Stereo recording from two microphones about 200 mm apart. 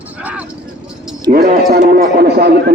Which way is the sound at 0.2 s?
5° right (ahead or behind).